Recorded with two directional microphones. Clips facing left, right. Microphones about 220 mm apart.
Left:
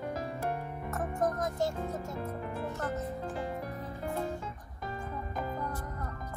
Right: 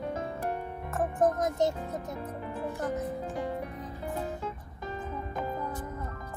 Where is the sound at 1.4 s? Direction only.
20° right (ahead or behind).